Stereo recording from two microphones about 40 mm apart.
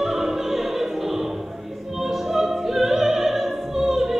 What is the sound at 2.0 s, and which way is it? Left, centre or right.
Music, centre.